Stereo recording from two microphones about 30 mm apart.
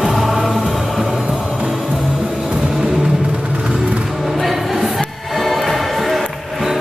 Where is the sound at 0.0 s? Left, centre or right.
Centre.